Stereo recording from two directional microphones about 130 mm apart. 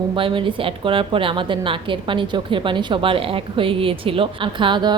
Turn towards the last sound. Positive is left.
turn(degrees=-35)  # may be behind; listen again after turning